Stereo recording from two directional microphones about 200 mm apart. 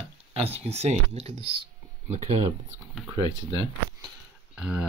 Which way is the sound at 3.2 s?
20° left (ahead or behind).